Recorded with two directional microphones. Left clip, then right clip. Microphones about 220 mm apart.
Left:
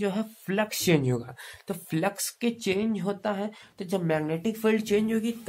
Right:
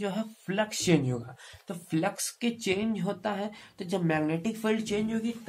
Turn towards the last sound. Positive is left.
turn(degrees=45)  # may be behind; listen again after turning